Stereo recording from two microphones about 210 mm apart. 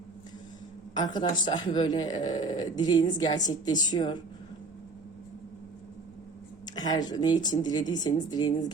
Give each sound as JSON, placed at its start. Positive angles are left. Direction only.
{"t": 1.0, "sound": "speech", "side_deg": 20}
{"t": 6.7, "sound": "speech", "side_deg": 20}